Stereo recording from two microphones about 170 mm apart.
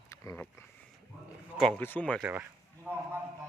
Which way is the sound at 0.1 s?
20° left (ahead or behind).